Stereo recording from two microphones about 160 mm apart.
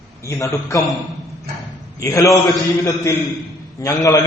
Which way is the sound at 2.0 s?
20° left (ahead or behind).